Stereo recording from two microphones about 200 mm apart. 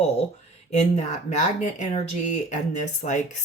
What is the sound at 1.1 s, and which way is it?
Speech, 35° left (ahead or behind).